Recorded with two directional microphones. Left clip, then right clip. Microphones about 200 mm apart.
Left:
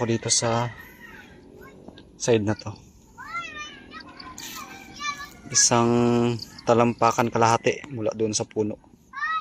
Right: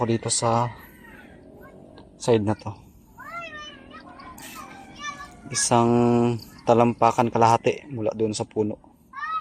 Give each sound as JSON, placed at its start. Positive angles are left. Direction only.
{"t": 0.0, "sound": "speech", "side_deg": 0}
{"t": 2.2, "sound": "speech", "side_deg": 0}
{"t": 3.2, "sound": "cat", "side_deg": -55}
{"t": 5.5, "sound": "speech", "side_deg": 0}